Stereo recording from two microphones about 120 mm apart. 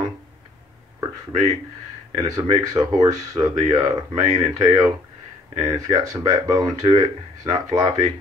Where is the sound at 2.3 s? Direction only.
35° right (ahead or behind).